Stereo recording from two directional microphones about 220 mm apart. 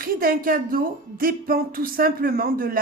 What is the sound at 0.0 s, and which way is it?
Speech, 40° right (ahead or behind).